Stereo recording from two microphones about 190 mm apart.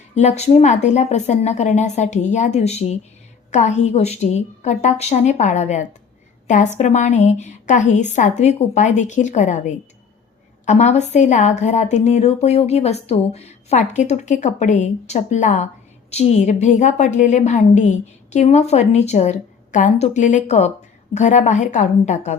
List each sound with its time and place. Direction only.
0.1 s a woman's voice: 35° left (ahead or behind)